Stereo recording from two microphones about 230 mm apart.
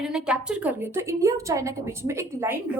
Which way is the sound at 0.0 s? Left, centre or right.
Centre.